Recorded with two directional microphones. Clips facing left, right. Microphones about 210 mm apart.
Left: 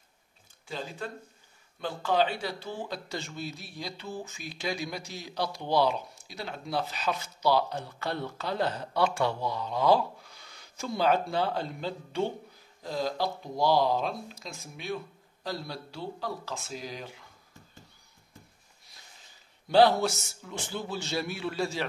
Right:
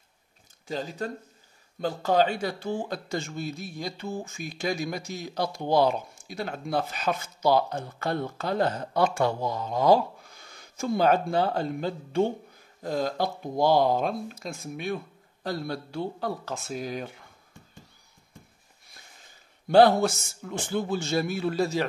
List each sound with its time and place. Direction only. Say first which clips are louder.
0.7 s speech: right 5 dB; 40° right (ahead or behind)
19.7 s speech: right 3 dB; 50° right (ahead or behind)